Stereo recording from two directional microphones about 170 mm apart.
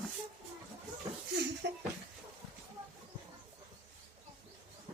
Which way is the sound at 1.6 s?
90° right.